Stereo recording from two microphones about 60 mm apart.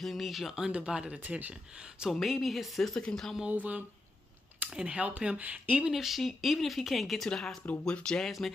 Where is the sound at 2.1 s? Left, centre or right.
Centre.